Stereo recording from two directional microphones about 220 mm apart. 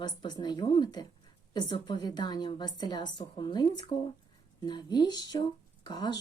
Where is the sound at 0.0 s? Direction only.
20° left (ahead or behind).